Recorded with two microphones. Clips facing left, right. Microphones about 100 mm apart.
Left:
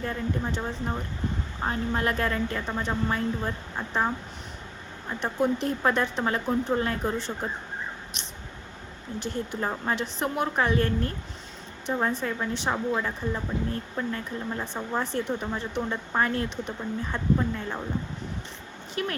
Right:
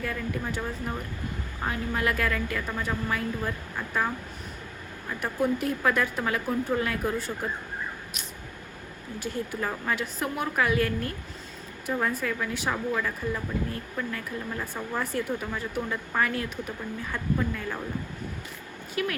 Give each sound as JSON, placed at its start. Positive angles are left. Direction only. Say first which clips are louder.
{"t": 0.0, "sound": "a woman's voice", "louder": "left 2 dB", "side_deg": 30}
{"t": 9.6, "sound": "a woman's voice", "louder": "left 2 dB", "side_deg": 30}
{"t": 19.0, "sound": "speech", "louder": "right 1 dB", "side_deg": 35}